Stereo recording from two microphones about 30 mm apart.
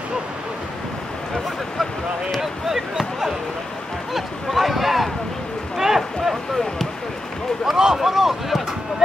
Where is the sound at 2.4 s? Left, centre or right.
Centre.